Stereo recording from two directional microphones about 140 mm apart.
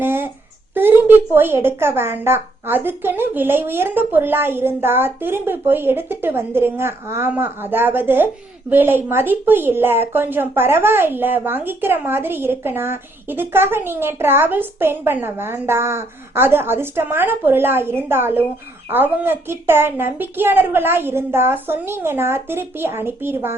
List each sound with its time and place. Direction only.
0.0 s child singing: 15° right (ahead or behind)
0.7 s speech: 15° right (ahead or behind)